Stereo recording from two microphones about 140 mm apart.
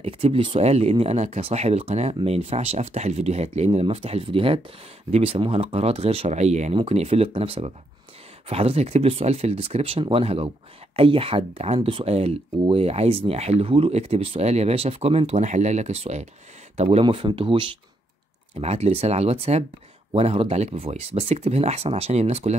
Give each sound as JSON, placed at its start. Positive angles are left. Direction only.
{"t": 0.0, "sound": "speech", "side_deg": -40}
{"t": 18.6, "sound": "speech", "side_deg": -50}